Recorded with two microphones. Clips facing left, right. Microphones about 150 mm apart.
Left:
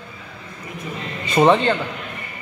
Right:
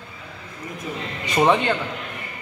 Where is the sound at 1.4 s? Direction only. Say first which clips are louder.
Left 3 dB; 15° left (ahead or behind).